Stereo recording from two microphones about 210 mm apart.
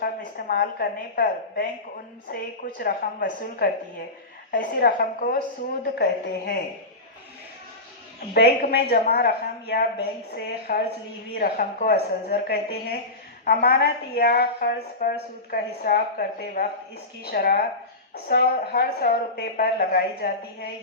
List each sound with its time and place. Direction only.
0.0 s a woman's voice: 45° left (ahead or behind)
8.3 s a woman's voice: 50° left (ahead or behind)